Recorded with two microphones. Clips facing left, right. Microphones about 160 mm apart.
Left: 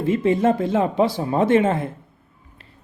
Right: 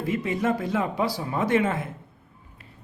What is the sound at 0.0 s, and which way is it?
Speech, 25° left (ahead or behind).